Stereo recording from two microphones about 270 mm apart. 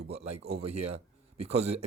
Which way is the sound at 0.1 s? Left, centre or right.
Right.